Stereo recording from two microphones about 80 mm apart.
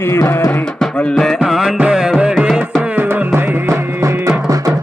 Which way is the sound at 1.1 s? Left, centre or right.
Centre.